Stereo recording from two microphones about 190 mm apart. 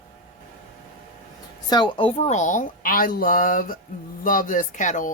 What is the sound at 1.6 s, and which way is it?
A woman's voice, 25° left (ahead or behind).